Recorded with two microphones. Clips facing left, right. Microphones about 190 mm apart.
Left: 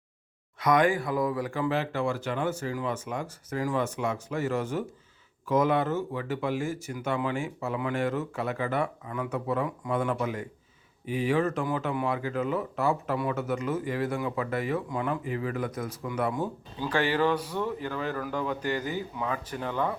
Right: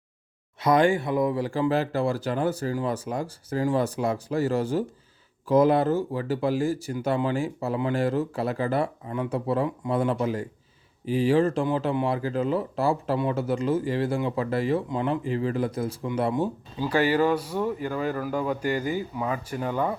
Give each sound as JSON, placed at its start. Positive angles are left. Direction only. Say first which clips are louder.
{"t": 0.6, "sound": "speech", "louder": "right 3 dB", "side_deg": -30}
{"t": 16.8, "sound": "speech", "louder": "right 4 dB", "side_deg": -10}